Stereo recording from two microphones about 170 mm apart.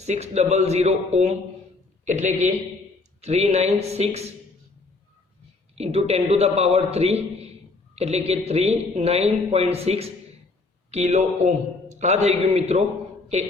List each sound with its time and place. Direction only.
0.0 s a man's voice: 40° right (ahead or behind)
5.7 s speech: 35° right (ahead or behind)